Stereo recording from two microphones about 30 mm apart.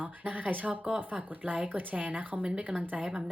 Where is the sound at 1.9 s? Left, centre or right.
Right.